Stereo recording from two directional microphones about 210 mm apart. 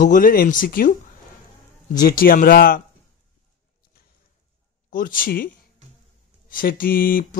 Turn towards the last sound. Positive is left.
turn(degrees=45)  # may be behind; listen again after turning